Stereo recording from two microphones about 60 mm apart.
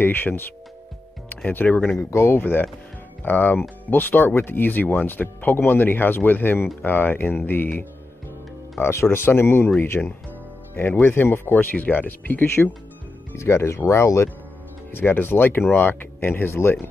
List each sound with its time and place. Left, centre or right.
0.0 s speech: left
1.5 s speech: left
13.4 s speech: left
14.9 s speech: left